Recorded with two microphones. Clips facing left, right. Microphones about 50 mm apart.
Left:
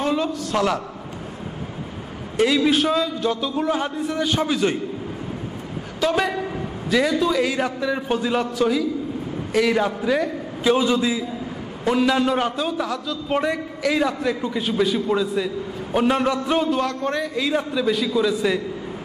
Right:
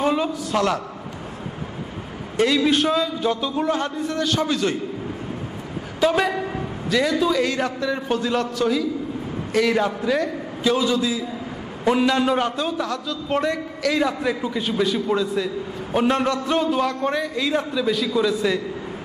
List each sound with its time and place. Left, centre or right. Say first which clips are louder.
0.0 s a sound: right 1 dB; centre
2.3 s a man's voice: even; centre
5.9 s a woman's voice: right 2 dB; centre
6.9 s a man's voice: even; centre
10.7 s a man's voice: left 2 dB; left
11.8 s a man's voice: even; centre
14.0 s a man's voice: even; centre
16.6 s a man's voice: right 1 dB; centre